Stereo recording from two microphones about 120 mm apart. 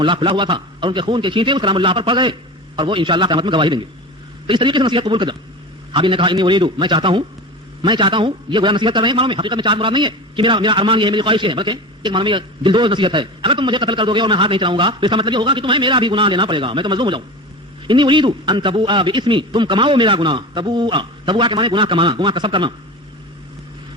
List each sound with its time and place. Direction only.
0.0 s a man's voice: 45° right (ahead or behind)